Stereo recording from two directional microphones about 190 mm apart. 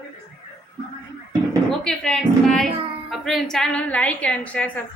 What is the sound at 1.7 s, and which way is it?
A woman's voice, 5° left (ahead or behind).